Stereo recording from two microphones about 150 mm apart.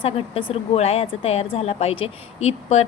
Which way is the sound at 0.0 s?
35° left (ahead or behind).